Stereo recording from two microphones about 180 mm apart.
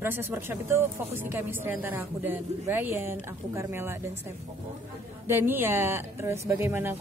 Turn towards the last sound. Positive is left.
turn(degrees=-10)  # may be behind; listen again after turning